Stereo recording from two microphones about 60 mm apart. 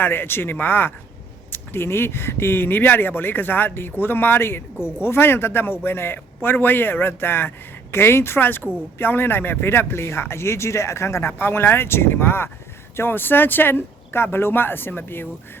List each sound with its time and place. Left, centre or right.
0.0 s a man's voice: left